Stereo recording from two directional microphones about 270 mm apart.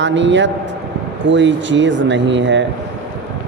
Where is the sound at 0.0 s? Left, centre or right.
Right.